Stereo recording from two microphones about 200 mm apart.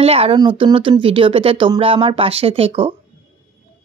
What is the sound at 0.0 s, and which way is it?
Speech, 30° right (ahead or behind).